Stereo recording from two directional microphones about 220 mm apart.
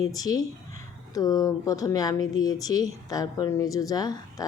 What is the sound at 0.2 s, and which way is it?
Speech, 15° left (ahead or behind).